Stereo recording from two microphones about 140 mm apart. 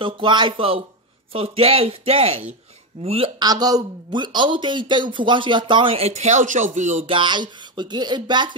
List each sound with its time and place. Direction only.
0.0 s speech: 35° right (ahead or behind)
3.3 s speech: 30° right (ahead or behind); by 7.1 s 60° right (ahead or behind)
7.1 s speech: 35° right (ahead or behind)